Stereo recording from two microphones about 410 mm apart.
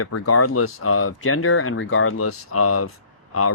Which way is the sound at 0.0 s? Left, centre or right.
Left.